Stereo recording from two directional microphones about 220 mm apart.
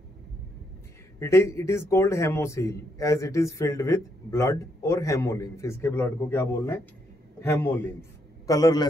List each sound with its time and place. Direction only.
1.2 s a man's voice: 10° left (ahead or behind)